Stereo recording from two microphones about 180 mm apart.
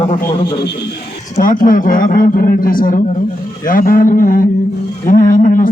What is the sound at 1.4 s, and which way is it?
A man's voice, 50° left (ahead or behind).